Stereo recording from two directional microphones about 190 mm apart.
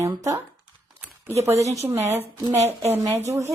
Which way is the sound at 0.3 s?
20° right (ahead or behind).